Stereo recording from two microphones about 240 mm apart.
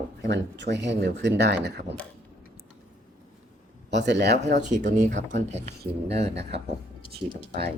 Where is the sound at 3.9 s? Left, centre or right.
Right.